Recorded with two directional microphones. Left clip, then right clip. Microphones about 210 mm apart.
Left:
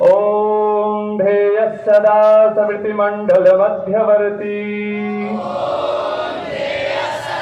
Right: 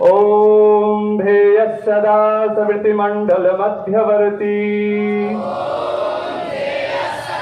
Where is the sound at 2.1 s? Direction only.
50° right (ahead or behind).